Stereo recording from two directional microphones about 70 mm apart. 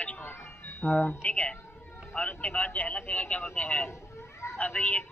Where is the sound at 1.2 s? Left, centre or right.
Centre.